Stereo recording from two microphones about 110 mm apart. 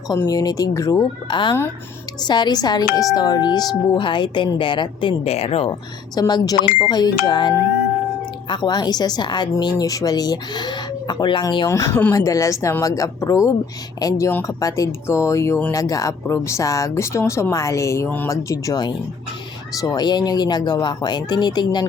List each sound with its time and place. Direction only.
0.1 s speech: 35° left (ahead or behind)
1.3 s speech: 45° left (ahead or behind); by 5.7 s 65° left (ahead or behind)
6.1 s speech: 40° left (ahead or behind)
11.7 s speech: 25° left (ahead or behind)
12.1 s speech: 30° left (ahead or behind)